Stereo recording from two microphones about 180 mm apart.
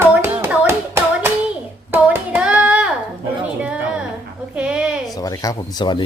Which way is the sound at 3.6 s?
5° right (ahead or behind).